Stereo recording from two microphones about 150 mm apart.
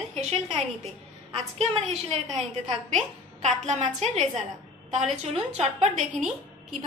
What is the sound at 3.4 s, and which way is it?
Speech, 50° right (ahead or behind).